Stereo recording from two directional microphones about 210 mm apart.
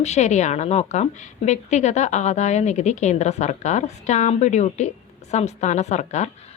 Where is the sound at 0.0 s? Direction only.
35° left (ahead or behind).